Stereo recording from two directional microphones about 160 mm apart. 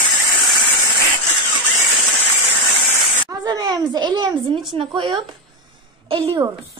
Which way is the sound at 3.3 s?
25° right (ahead or behind).